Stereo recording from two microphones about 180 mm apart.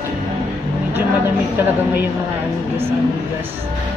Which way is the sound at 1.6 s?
10° right (ahead or behind).